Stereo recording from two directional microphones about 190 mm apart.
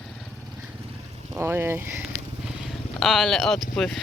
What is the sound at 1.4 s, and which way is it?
Speech, 10° right (ahead or behind).